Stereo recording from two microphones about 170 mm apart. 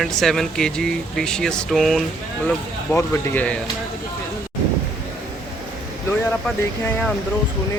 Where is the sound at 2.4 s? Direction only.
10° left (ahead or behind).